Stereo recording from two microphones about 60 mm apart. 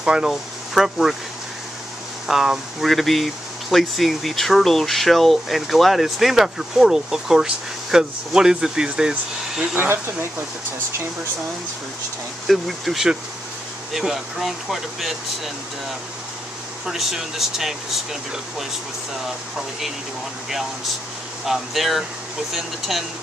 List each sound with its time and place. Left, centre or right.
0.0 s speech: centre
2.2 s speech: centre
9.8 s speech: right
12.4 s speech: centre
16.8 s speech: centre
21.5 s speech: centre